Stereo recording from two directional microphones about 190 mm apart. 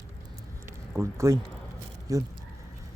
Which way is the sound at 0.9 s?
15° right (ahead or behind).